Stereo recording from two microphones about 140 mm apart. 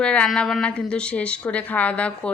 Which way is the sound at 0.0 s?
5° left (ahead or behind).